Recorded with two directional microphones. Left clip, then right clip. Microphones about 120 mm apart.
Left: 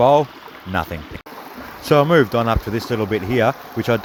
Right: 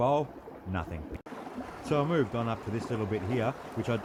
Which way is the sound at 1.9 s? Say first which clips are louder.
Left 15 dB; 55° left (ahead or behind).